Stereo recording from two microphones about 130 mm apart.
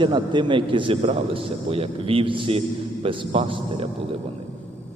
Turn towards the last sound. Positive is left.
turn(degrees=-45)  # may be behind; listen again after turning